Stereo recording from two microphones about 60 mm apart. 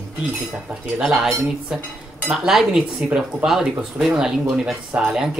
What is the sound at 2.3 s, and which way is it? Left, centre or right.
Speech, centre.